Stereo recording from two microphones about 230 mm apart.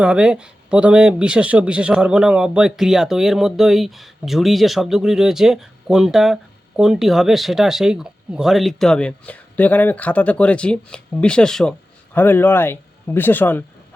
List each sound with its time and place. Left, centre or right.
0.0 s speech: centre